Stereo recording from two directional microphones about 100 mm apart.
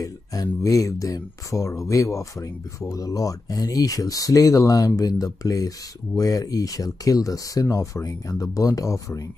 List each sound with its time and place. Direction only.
0.0 s speech: 35° left (ahead or behind)